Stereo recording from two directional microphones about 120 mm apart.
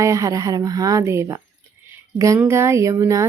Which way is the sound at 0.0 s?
25° right (ahead or behind).